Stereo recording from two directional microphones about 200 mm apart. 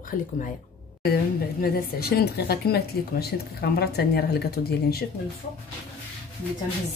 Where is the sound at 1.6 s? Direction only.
50° left (ahead or behind).